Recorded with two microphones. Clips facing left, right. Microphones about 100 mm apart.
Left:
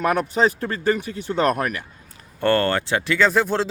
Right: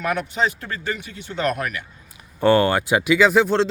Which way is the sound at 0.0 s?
40° left (ahead or behind).